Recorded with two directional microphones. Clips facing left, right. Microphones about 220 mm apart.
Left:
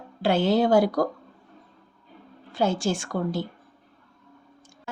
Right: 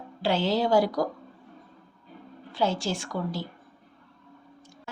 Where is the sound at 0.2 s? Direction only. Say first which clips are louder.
Left 4 dB; 50° left (ahead or behind).